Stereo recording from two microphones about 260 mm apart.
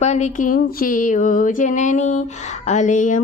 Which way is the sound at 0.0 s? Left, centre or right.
Left.